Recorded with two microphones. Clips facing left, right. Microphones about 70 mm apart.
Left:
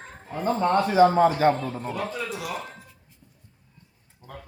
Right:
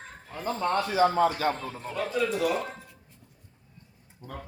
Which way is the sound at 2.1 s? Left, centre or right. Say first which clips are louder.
Right 5 dB; centre.